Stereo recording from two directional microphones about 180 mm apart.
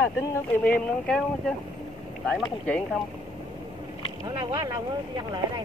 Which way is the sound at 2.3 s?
Centre (ahead or behind).